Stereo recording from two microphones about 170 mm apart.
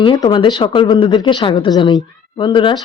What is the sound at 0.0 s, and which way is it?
Speech, 25° left (ahead or behind).